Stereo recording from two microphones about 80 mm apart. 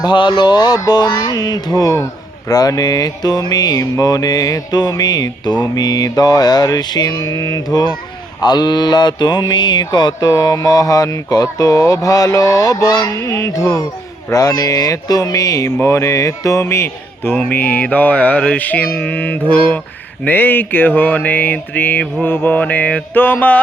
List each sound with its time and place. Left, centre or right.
0.0 s music: left
2.5 s mantra: left
8.4 s music: left
10.2 s mantra: left
13.1 s a sound: left
17.4 s mantra: left